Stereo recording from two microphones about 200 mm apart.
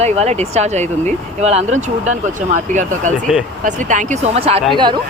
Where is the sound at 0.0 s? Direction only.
35° right (ahead or behind).